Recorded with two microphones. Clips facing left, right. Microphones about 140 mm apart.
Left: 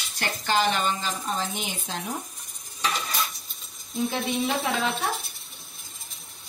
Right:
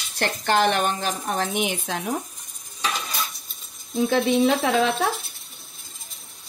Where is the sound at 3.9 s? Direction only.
85° right.